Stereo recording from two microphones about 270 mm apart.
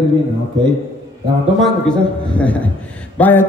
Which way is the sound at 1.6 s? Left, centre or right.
Centre.